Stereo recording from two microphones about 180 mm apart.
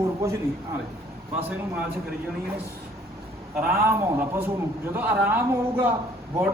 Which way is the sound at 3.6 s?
10° right (ahead or behind).